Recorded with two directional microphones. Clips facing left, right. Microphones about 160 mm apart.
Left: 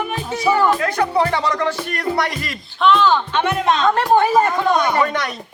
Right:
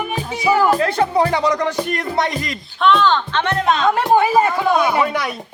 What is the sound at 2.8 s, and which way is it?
Speech, centre (ahead or behind).